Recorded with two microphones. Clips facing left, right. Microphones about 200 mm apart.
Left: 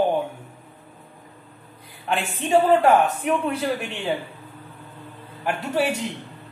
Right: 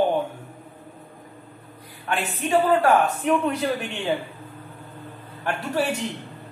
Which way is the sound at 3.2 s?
10° left (ahead or behind).